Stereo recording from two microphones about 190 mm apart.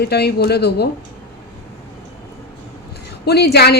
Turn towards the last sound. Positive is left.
turn(degrees=60)  # may be behind; listen again after turning